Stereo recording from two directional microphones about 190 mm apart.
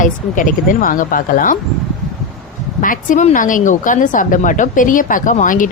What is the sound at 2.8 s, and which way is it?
A woman's voice, 45° left (ahead or behind).